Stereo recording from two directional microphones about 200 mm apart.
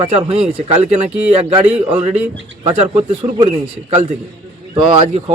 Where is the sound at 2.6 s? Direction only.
30° right (ahead or behind).